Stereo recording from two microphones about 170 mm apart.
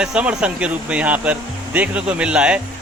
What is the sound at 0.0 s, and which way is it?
Speech, 5° right (ahead or behind).